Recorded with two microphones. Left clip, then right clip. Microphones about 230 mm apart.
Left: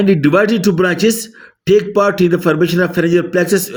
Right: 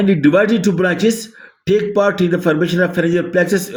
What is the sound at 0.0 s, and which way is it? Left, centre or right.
Speech, left.